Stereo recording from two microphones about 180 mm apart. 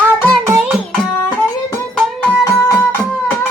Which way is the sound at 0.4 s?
15° right (ahead or behind).